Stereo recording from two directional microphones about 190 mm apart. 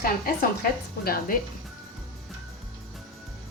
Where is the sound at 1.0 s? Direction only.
50° left (ahead or behind).